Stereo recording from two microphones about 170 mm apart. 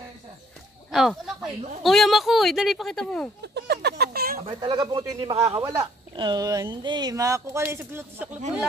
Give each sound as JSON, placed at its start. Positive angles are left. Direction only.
{"t": 0.9, "sound": "speech", "side_deg": 0}
{"t": 3.5, "sound": "a sound", "side_deg": -75}
{"t": 4.4, "sound": "speech", "side_deg": -30}